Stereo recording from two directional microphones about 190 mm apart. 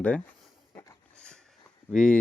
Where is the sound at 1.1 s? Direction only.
5° left (ahead or behind).